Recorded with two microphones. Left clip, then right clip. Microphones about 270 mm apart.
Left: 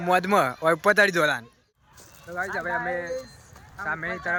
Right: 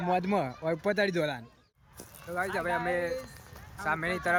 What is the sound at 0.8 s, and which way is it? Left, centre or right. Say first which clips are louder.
Speech: left 9 dB; centre.